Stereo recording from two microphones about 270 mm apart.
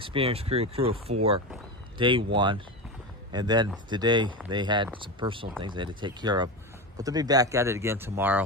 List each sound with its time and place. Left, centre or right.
0.0 s speech: centre